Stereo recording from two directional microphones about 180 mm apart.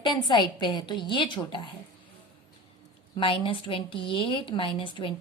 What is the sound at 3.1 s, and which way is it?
A woman's voice, 30° left (ahead or behind).